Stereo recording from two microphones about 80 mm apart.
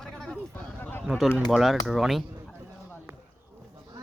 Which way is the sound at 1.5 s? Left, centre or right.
Centre.